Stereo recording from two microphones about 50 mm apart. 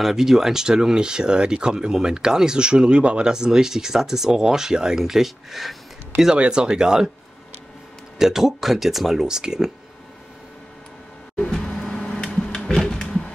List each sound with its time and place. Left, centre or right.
0.0 s speech: centre
6.1 s speech: centre
8.2 s speech: centre
11.7 s a sound: centre
12.2 s printer: centre
12.7 s a sound: centre